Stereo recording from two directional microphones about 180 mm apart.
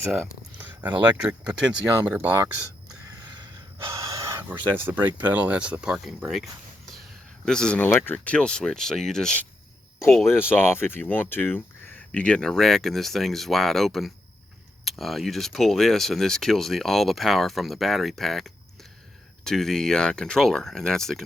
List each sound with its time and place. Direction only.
0.6 s speech: 10° right (ahead or behind)
2.0 s speech: 15° right (ahead or behind)
3.1 s gasp: 25° right (ahead or behind)
4.3 s speech: 10° right (ahead or behind)
10.3 s speech: 10° left (ahead or behind)